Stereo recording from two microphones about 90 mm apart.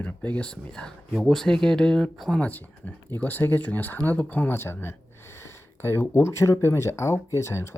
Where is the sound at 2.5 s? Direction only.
20° left (ahead or behind).